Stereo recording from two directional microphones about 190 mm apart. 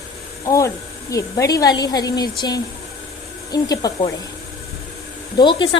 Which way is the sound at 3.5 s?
20° left (ahead or behind).